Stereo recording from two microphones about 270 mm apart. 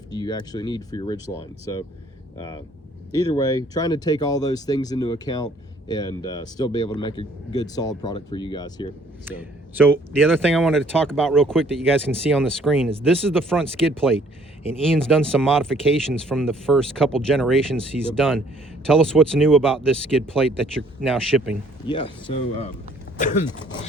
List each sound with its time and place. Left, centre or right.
0.1 s speech: centre
3.1 s speech: centre
9.7 s speech: centre
21.8 s speech: centre